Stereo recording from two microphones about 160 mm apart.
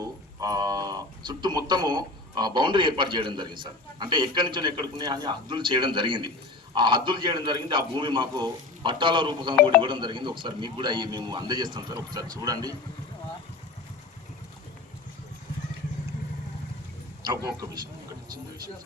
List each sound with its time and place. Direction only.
0.0 s speech: 25° right (ahead or behind)
17.2 s speech: 20° right (ahead or behind)